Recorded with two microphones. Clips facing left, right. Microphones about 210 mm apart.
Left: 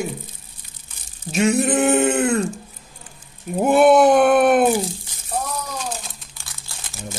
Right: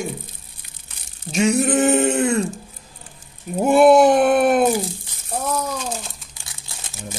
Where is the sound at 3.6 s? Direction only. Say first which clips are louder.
Right 1 dB; centre (ahead or behind).